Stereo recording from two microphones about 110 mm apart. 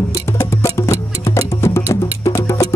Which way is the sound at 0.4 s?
25° left (ahead or behind).